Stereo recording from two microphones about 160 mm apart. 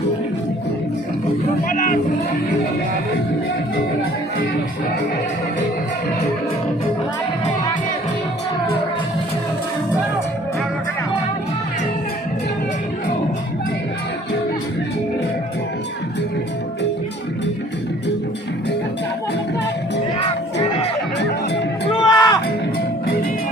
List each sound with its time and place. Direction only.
21.8 s music: 25° left (ahead or behind)